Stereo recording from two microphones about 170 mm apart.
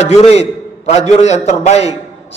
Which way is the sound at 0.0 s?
40° left (ahead or behind).